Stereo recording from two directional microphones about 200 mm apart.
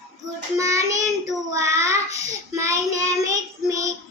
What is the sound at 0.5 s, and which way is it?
Child singing, 15° right (ahead or behind).